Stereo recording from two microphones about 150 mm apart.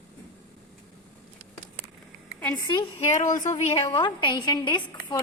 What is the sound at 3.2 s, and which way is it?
Speech, 60° left (ahead or behind).